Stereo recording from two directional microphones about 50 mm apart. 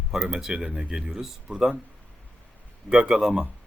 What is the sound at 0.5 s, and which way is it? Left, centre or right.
Speech, right.